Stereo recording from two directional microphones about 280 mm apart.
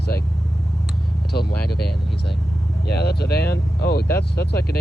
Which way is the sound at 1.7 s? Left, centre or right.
Left.